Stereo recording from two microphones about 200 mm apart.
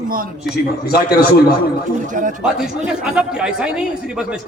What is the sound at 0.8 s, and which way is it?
Speech, 50° left (ahead or behind).